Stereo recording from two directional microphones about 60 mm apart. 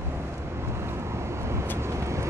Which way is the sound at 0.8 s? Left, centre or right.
Right.